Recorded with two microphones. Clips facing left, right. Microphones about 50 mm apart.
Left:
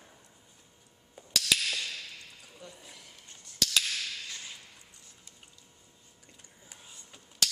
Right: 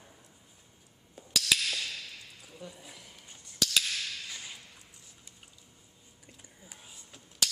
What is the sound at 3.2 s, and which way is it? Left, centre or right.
Whip, centre.